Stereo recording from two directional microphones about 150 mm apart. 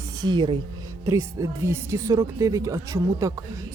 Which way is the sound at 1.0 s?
20° right (ahead or behind).